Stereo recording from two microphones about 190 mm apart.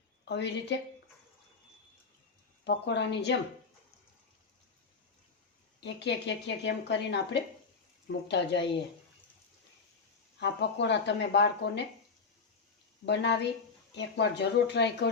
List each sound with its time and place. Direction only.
0.3 s speech: 65° left (ahead or behind)
2.6 s speech: 65° left (ahead or behind)
5.8 s speech: 65° left (ahead or behind)
10.4 s speech: 65° left (ahead or behind)
13.1 s speech: 65° left (ahead or behind)